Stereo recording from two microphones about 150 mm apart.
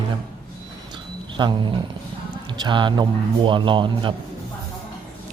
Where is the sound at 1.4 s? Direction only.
30° right (ahead or behind).